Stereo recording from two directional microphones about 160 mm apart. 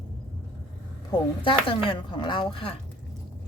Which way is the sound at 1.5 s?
35° left (ahead or behind).